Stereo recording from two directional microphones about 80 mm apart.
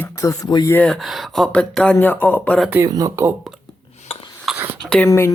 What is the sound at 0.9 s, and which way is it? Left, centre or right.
Speech, centre.